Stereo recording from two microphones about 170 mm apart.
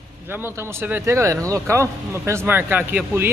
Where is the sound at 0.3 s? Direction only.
15° right (ahead or behind).